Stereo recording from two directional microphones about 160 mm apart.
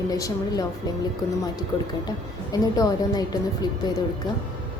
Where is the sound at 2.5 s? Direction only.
25° left (ahead or behind).